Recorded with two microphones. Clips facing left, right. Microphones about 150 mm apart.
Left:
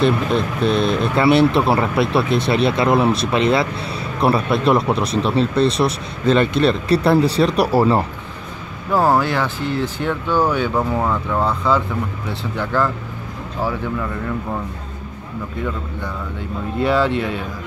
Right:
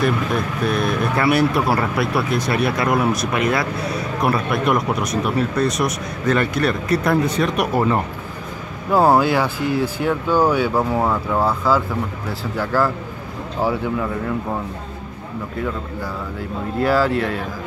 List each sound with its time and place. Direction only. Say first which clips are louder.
0.0 s speech: left 3 dB; 25° left (ahead or behind)
8.9 s speech: right 2 dB; 15° right (ahead or behind)
16.8 s speech: even; centre (ahead or behind)